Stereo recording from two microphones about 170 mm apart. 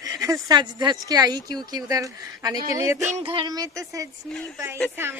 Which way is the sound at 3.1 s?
35° right (ahead or behind).